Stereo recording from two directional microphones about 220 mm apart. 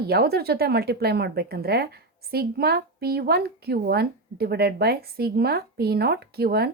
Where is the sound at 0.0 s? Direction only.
45° right (ahead or behind).